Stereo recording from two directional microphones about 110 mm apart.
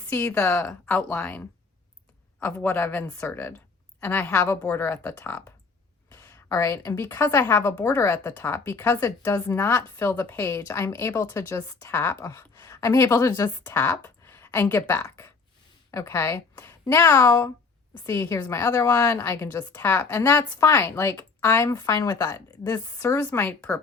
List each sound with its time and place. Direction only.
0.1 s a woman's voice: 20° left (ahead or behind)
2.6 s a woman's voice: 20° left (ahead or behind)